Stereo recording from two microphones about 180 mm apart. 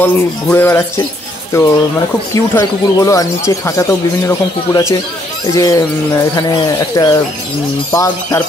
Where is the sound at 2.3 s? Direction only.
15° left (ahead or behind).